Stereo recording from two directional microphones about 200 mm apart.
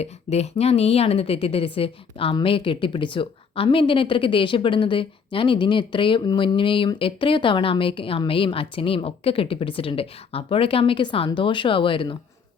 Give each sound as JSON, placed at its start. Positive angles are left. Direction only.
{"t": 0.0, "sound": "a woman's voice", "side_deg": 30}